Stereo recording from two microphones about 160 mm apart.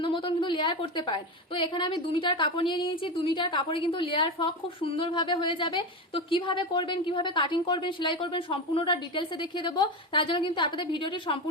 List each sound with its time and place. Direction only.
0.0 s a woman's voice: 30° left (ahead or behind)